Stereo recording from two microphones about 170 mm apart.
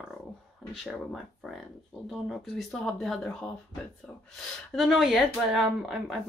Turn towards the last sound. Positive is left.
turn(degrees=0)  # may be behind; listen again after turning